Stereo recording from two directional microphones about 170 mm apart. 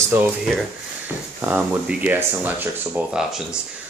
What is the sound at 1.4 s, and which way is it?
Speech, 10° right (ahead or behind).